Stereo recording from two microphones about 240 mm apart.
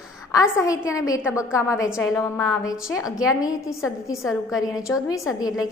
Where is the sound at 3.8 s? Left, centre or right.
Centre.